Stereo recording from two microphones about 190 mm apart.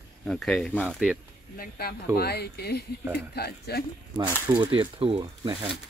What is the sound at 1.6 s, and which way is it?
Speech, 55° left (ahead or behind).